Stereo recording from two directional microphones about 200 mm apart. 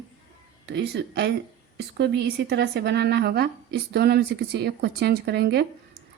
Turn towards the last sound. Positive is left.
turn(degrees=-55)  # may be behind; listen again after turning